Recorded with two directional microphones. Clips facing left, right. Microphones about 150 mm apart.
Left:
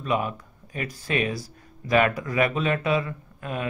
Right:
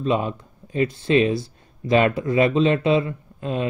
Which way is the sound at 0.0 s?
25° right (ahead or behind).